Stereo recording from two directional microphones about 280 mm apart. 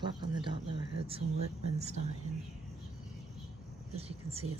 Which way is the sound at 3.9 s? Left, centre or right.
Right.